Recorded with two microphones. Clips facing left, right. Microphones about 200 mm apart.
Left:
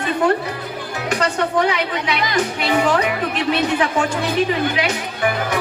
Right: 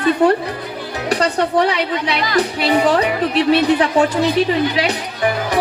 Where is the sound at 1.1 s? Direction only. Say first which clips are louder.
Right 3 dB; 35° right (ahead or behind).